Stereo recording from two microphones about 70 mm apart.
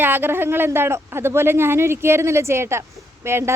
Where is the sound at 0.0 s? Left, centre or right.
Right.